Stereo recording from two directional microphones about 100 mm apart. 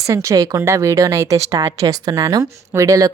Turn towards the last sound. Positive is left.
turn(degrees=-35)  # may be behind; listen again after turning